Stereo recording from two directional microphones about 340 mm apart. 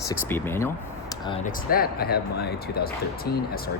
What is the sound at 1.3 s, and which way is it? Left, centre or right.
Speech, centre.